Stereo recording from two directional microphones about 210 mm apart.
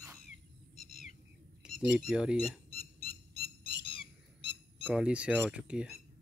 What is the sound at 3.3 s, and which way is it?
Squawk, 25° left (ahead or behind).